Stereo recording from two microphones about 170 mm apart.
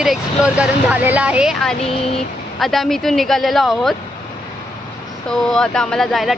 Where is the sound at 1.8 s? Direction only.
35° left (ahead or behind).